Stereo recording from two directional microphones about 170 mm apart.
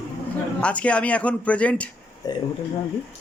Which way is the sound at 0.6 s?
5° left (ahead or behind).